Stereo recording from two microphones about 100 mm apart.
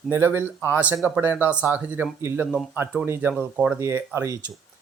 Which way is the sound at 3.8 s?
30° right (ahead or behind).